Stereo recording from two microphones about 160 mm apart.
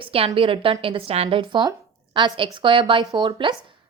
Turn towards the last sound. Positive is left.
turn(degrees=-30)  # may be behind; listen again after turning